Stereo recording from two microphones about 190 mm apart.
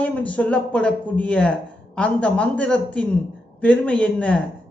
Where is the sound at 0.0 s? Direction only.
5° left (ahead or behind).